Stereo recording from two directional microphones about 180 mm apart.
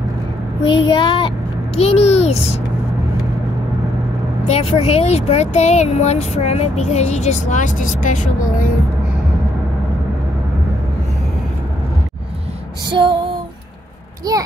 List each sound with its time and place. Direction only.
0.7 s child singing: 25° left (ahead or behind)
1.8 s a child's voice: 35° left (ahead or behind)
4.5 s speech: 35° left (ahead or behind)
12.9 s female singing: 25° right (ahead or behind)